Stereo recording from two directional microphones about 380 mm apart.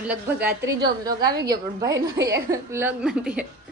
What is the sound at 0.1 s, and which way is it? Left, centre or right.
A woman's voice, centre.